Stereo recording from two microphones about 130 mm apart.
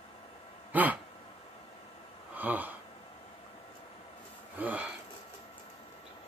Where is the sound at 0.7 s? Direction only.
10° right (ahead or behind).